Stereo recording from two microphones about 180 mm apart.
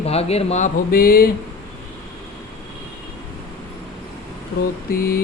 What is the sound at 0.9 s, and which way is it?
Mantra, 55° left (ahead or behind).